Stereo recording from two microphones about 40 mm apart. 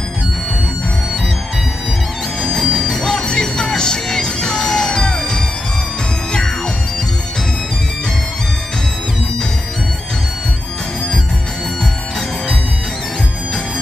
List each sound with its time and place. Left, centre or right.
2.4 s music: centre